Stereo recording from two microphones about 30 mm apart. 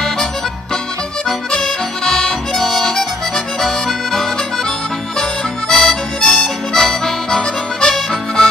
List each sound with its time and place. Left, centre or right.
1.5 s music: left
2.5 s music: centre
5.7 s harmonica: centre